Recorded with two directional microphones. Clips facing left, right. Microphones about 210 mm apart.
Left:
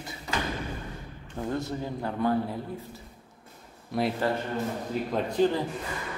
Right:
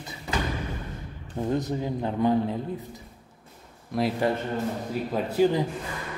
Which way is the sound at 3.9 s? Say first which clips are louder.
Right 2 dB; centre (ahead or behind).